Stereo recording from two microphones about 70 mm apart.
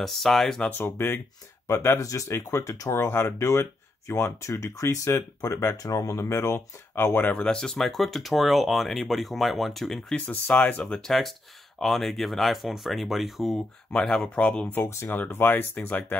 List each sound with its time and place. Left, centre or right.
0.0 s speech: centre
0.6 s speech: left
0.9 s speech: left
2.0 s speech: left
6.1 s speech: left
7.3 s speech: centre
10.1 s speech: left
10.8 s speech: centre
13.9 s speech: centre
15.0 s speech: left